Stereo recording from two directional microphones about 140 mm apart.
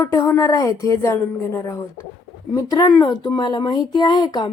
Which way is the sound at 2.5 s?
25° left (ahead or behind).